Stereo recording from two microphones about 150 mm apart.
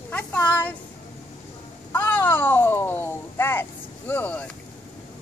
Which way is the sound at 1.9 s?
10° left (ahead or behind).